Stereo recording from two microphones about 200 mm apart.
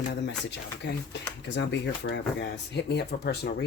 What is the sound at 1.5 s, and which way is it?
Speech, 60° left (ahead or behind).